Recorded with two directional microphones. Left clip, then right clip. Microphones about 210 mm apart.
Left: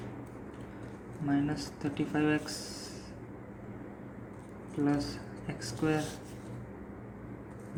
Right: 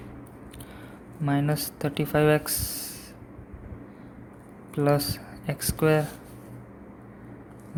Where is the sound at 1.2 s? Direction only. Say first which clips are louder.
Right 5 dB; 50° right (ahead or behind).